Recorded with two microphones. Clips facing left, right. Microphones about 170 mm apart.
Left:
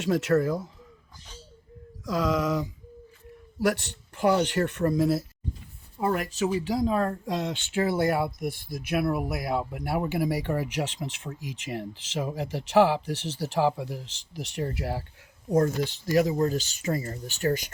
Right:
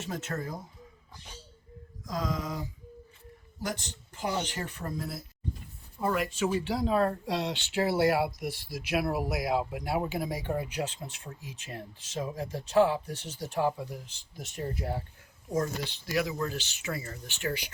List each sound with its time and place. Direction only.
0.0 s speech: 90° left
2.0 s speech: 80° left
3.6 s speech: 65° left (ahead or behind)
6.0 s speech: 45° left (ahead or behind)
9.8 s speech: 60° left (ahead or behind); by 15.0 s 85° left
15.5 s speech: 50° left (ahead or behind)